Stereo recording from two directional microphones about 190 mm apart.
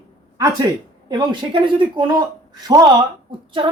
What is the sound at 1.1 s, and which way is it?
Speech, 25° right (ahead or behind).